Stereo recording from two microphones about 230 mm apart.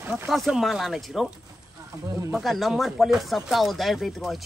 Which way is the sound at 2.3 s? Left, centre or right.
Centre.